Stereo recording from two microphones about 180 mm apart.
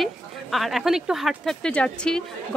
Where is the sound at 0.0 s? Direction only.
Centre (ahead or behind).